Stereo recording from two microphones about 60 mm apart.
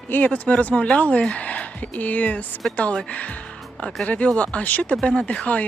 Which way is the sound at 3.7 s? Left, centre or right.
Centre.